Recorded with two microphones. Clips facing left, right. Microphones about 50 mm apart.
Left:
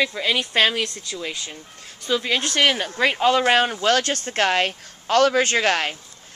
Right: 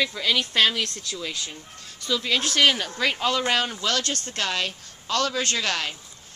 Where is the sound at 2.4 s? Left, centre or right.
Centre.